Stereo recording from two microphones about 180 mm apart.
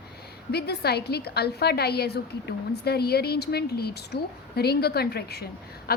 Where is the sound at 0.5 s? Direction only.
65° left (ahead or behind).